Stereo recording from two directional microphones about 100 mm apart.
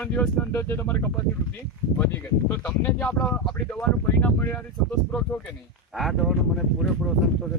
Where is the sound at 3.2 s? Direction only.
10° left (ahead or behind).